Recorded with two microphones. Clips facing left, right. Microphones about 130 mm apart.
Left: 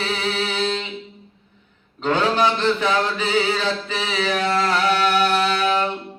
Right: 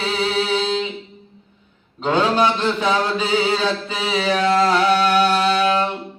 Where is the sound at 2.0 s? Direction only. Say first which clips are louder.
Right 2 dB; 15° right (ahead or behind).